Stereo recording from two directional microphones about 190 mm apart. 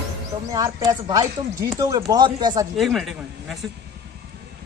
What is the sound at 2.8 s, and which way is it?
Speech, centre (ahead or behind).